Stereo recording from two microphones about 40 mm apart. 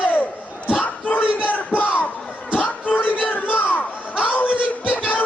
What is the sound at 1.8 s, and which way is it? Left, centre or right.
Crowd, left.